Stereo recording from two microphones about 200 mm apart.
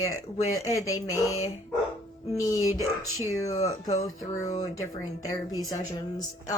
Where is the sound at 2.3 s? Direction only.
15° left (ahead or behind).